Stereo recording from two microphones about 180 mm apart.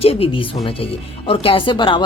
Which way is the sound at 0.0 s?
35° left (ahead or behind).